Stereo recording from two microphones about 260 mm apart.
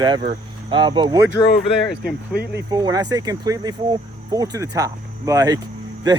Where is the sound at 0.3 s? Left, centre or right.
Centre.